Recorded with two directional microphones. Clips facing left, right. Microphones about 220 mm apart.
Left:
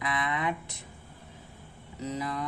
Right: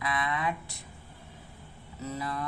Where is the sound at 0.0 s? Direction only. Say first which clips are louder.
Even; 20° left (ahead or behind).